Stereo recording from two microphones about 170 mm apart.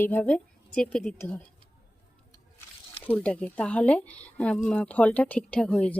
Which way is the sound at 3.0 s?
5° left (ahead or behind).